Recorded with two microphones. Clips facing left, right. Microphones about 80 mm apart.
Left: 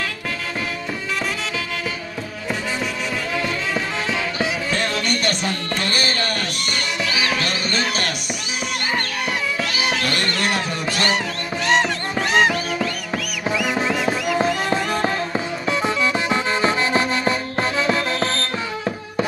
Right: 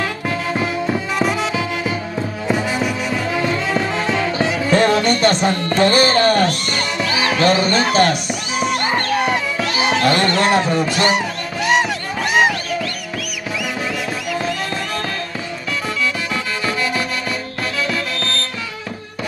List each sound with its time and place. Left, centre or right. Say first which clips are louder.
2.4 s music: right 5 dB; centre
3.7 s music: right 5 dB; centre
4.6 s music: right 8 dB; right
11.6 s music: right 2 dB; centre
13.7 s music: left 3 dB; left
14.5 s music: left 2 dB; centre
16.3 s music: left 3 dB; left